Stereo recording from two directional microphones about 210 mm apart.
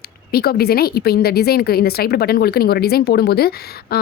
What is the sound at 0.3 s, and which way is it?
A woman's voice, 45° left (ahead or behind).